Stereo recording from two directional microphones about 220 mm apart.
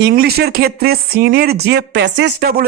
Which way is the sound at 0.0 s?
45° right (ahead or behind).